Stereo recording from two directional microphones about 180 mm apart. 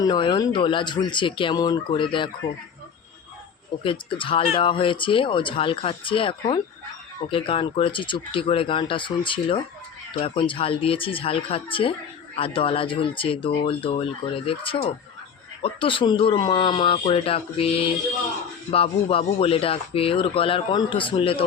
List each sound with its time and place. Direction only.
0.0 s speech: 25° left (ahead or behind)
3.8 s speech: 30° left (ahead or behind)